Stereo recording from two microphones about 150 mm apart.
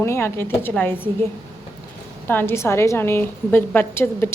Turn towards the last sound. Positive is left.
turn(degrees=15)  # may be behind; listen again after turning